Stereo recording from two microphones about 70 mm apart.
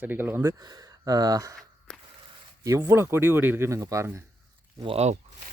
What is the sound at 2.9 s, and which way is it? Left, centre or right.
Speech, right.